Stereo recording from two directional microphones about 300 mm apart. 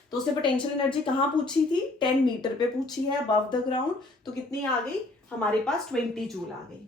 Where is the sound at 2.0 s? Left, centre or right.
Centre.